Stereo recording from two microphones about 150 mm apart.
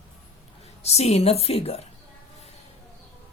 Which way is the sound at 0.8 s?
45° left (ahead or behind).